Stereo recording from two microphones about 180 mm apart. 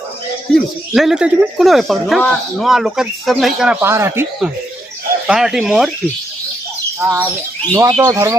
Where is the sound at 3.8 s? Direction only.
15° right (ahead or behind).